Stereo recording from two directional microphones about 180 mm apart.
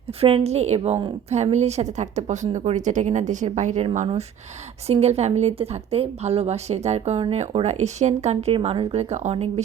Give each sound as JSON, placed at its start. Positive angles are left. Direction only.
{"t": 0.2, "sound": "a woman's voice", "side_deg": -35}